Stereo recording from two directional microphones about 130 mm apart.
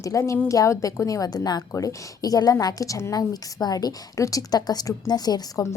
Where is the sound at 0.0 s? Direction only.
25° left (ahead or behind).